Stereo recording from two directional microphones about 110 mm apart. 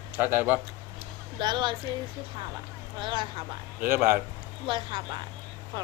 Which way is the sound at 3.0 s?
50° right (ahead or behind).